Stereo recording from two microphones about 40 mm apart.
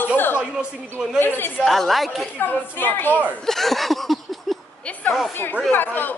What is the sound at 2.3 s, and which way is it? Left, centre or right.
Speech, left.